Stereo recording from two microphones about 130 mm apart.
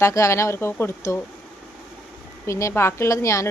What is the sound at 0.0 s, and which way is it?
A woman's voice, 25° left (ahead or behind).